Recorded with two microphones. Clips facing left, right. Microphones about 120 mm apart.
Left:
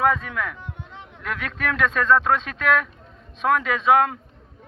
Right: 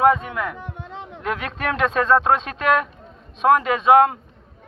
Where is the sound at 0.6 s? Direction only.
85° right.